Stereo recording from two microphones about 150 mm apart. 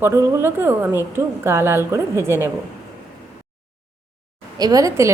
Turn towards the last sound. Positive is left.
turn(degrees=-25)  # may be behind; listen again after turning